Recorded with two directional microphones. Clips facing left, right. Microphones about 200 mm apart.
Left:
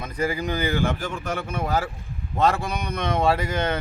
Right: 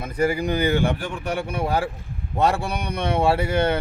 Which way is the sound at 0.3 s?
10° right (ahead or behind).